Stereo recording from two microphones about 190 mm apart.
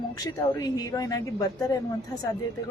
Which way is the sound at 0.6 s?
20° left (ahead or behind).